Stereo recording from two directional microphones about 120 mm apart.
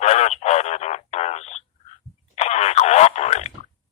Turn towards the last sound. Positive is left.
turn(degrees=65)  # may be behind; listen again after turning